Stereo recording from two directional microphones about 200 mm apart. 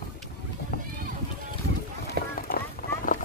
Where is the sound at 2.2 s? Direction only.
55° right (ahead or behind).